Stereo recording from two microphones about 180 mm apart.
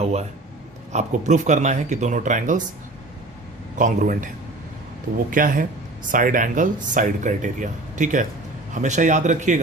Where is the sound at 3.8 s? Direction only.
45° right (ahead or behind).